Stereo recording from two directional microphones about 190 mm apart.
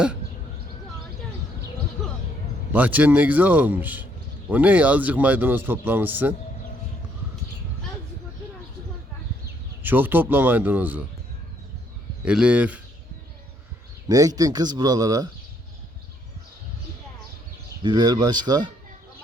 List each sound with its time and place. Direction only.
2.7 s speech: 10° right (ahead or behind)
9.8 s speech: 10° right (ahead or behind)
12.2 s speech: 5° right (ahead or behind)
14.1 s speech: 20° right (ahead or behind)
17.8 s speech: 20° right (ahead or behind)